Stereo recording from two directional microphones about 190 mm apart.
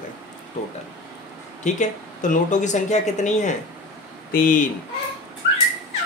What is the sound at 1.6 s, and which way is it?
Speech, 40° left (ahead or behind).